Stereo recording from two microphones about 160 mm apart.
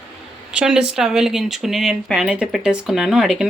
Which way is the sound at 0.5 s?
5° right (ahead or behind).